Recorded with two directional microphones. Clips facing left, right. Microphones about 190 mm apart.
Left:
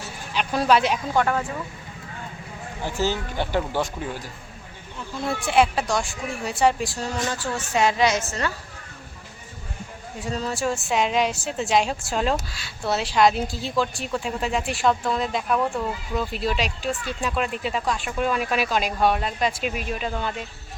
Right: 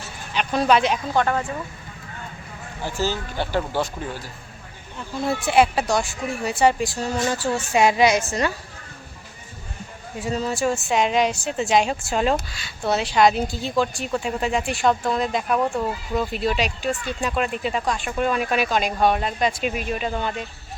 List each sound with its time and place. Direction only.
0.3 s a woman's voice: 5° left (ahead or behind)
2.8 s speech: 20° left (ahead or behind)
4.9 s a woman's voice: 5° right (ahead or behind)
10.2 s a woman's voice: 5° right (ahead or behind)